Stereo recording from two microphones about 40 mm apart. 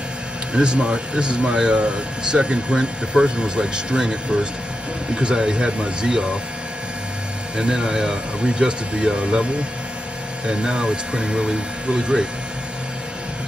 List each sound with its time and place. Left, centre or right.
0.5 s speech: right
7.5 s speech: centre